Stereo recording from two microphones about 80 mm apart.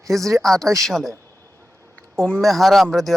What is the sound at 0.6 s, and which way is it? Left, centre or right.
Speech, right.